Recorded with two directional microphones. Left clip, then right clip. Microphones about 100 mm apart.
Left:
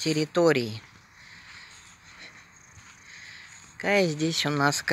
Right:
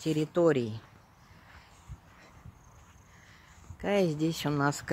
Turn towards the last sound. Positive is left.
turn(degrees=5)  # may be behind; listen again after turning